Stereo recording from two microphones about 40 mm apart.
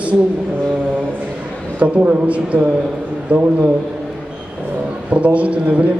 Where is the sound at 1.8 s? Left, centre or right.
Right.